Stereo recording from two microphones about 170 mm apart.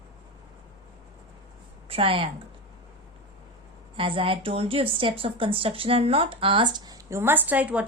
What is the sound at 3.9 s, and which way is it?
A woman's voice, 30° right (ahead or behind).